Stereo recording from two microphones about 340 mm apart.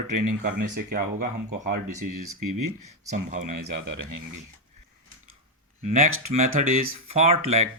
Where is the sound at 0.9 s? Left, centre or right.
Right.